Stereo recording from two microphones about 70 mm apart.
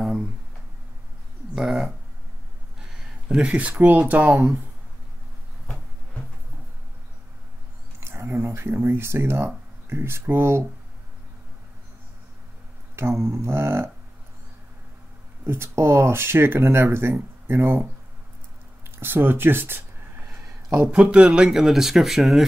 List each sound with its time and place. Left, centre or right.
1.5 s a sound: centre
2.8 s speech: centre; by 4.5 s right
8.0 s speech: right
12.9 s speech: right
15.4 s speech: right
18.9 s a sound: right
20.9 s speech: centre